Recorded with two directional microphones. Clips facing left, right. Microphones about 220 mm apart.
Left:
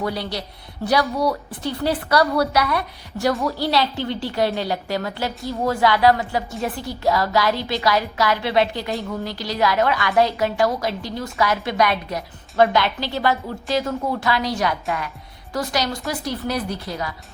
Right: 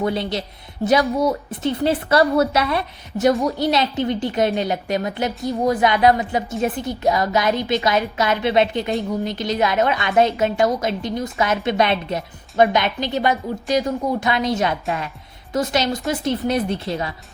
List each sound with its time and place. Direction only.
0.0 s a woman's voice: 25° right (ahead or behind)